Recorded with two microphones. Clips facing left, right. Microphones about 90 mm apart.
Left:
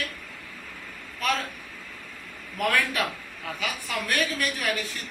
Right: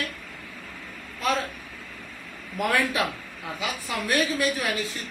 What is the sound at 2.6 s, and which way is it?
A woman's voice, 20° right (ahead or behind).